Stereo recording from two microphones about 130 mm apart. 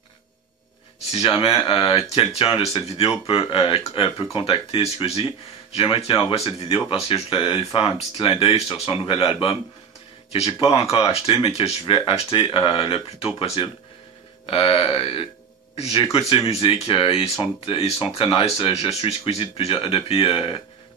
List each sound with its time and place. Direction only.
1.1 s speech: 45° left (ahead or behind)
14.4 s speech: 45° left (ahead or behind)